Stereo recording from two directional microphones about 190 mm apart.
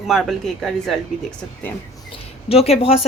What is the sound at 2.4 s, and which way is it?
Speech, 30° left (ahead or behind).